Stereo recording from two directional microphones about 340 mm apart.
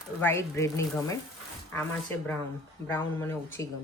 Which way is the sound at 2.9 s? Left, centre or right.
Centre.